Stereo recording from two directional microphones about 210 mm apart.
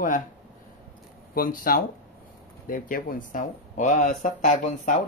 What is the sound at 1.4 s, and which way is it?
Speech, 45° left (ahead or behind).